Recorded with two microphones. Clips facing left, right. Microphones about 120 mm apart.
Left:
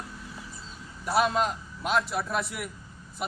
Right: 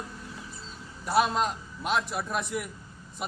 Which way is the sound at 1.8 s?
Centre (ahead or behind).